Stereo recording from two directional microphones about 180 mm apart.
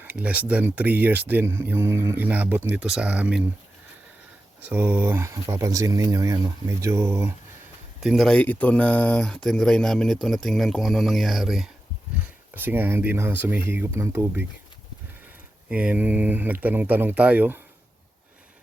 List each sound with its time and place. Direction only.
0.0 s speech: 10° right (ahead or behind)
4.6 s speech: 10° right (ahead or behind)
8.0 s speech: centre (ahead or behind); by 14.4 s 15° right (ahead or behind)
15.7 s speech: 5° right (ahead or behind)